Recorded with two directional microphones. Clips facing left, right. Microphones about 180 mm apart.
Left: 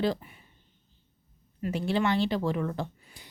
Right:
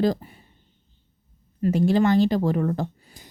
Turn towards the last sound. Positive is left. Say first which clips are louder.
# right 5 dB
turn(degrees=-45)  # may be behind; listen again after turning